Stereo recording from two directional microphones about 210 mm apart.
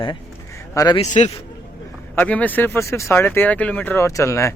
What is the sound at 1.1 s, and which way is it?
Speech, 30° left (ahead or behind).